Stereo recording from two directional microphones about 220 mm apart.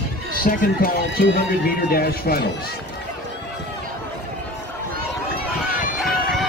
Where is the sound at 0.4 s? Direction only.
40° left (ahead or behind).